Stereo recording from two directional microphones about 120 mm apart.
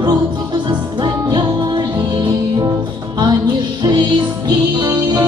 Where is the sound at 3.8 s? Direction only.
35° right (ahead or behind).